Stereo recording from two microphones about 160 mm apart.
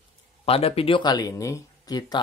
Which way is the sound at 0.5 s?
35° left (ahead or behind).